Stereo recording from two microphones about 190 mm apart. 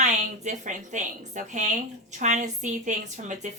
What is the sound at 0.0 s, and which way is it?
A woman's voice, 40° right (ahead or behind).